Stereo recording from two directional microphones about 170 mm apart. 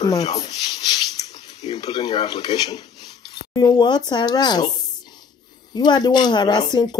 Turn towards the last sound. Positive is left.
turn(degrees=25)  # may be behind; listen again after turning